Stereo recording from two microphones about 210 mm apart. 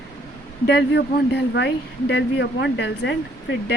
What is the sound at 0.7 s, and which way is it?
Speech, 55° left (ahead or behind).